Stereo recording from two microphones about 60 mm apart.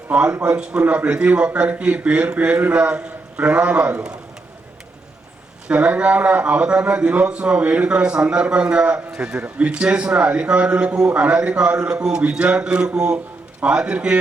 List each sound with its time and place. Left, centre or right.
0.1 s a man's voice: centre
5.6 s a man's voice: right